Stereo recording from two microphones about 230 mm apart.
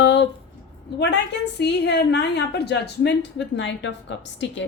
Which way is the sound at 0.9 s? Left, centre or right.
Left.